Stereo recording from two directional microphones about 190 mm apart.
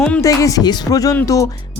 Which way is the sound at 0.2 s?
15° left (ahead or behind).